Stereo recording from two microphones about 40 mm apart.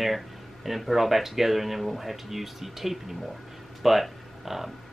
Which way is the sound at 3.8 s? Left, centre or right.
Centre.